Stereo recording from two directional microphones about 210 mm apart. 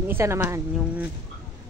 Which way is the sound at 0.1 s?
10° right (ahead or behind).